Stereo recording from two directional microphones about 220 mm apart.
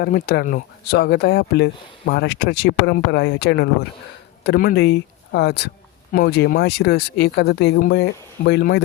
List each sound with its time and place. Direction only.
0.0 s speech: 45° left (ahead or behind)